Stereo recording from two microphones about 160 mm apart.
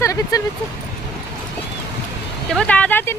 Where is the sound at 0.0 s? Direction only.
20° left (ahead or behind).